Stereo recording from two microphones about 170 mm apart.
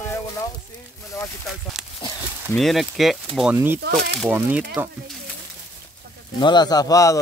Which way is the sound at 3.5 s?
10° right (ahead or behind).